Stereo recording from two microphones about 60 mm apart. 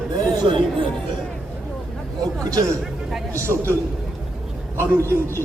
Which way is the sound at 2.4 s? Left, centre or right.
Right.